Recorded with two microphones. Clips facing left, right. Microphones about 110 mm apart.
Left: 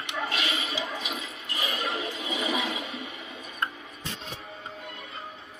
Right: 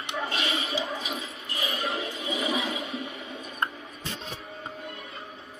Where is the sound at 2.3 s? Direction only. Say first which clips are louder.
Right 1 dB; 30° right (ahead or behind).